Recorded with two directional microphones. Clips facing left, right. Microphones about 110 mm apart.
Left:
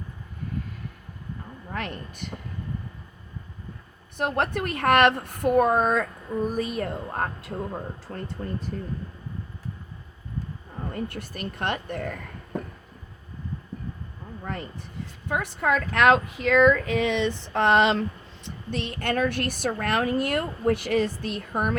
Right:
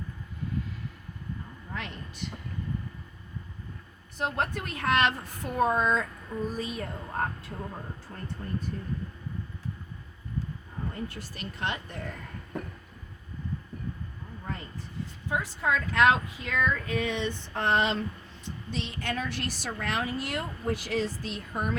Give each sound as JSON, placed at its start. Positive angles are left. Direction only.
{"t": 1.7, "sound": "speech", "side_deg": 55}
{"t": 4.2, "sound": "a woman's voice", "side_deg": 65}
{"t": 10.9, "sound": "a woman's voice", "side_deg": 55}
{"t": 15.3, "sound": "speech", "side_deg": 65}
{"t": 18.4, "sound": "a woman's voice", "side_deg": 55}